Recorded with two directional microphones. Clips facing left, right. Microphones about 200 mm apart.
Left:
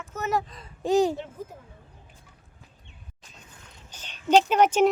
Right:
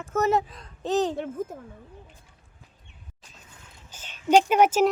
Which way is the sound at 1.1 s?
55° right (ahead or behind).